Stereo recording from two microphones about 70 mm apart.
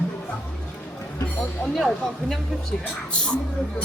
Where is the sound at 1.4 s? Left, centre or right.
Centre.